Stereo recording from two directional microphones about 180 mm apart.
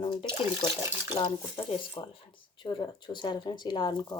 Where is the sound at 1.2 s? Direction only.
30° left (ahead or behind).